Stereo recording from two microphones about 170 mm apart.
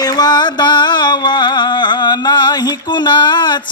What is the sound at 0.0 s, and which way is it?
Music, 20° left (ahead or behind).